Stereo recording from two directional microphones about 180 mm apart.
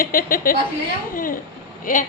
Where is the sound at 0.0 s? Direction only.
50° left (ahead or behind).